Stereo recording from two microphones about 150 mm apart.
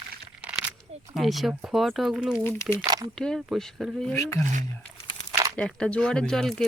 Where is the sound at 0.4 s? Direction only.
10° right (ahead or behind).